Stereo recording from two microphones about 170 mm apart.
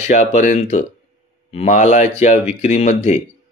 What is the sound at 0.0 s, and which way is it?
Speech, 40° left (ahead or behind).